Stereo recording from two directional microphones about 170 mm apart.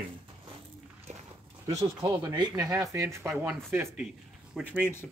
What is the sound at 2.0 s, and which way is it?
Speech, 25° right (ahead or behind).